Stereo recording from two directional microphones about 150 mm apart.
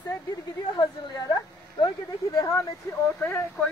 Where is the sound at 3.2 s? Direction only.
10° left (ahead or behind).